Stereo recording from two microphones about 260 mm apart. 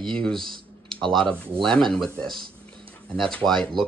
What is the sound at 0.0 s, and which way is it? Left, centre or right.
Speech, centre.